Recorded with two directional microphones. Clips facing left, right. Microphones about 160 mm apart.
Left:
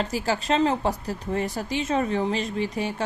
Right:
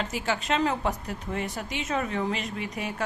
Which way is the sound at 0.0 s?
35° left (ahead or behind).